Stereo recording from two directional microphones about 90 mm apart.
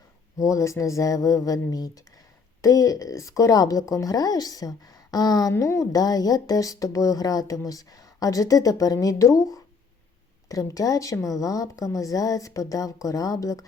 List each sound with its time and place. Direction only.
0.3 s a woman's voice: 40° left (ahead or behind)